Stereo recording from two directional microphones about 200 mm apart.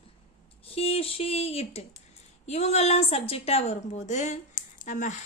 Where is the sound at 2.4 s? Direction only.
35° left (ahead or behind).